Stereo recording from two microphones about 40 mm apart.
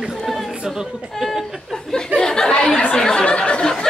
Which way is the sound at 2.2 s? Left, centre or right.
Centre.